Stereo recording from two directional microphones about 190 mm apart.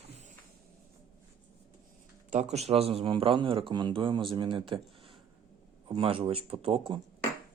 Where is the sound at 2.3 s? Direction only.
35° right (ahead or behind).